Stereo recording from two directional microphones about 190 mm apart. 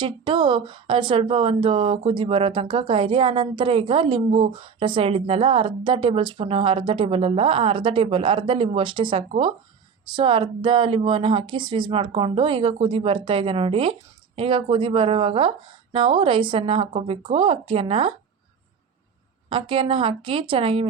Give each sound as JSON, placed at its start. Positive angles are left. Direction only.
{"t": 0.0, "sound": "speech", "side_deg": -25}
{"t": 19.5, "sound": "speech", "side_deg": -25}